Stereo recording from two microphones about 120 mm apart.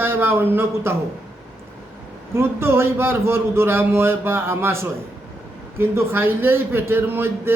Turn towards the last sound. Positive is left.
turn(degrees=-20)  # may be behind; listen again after turning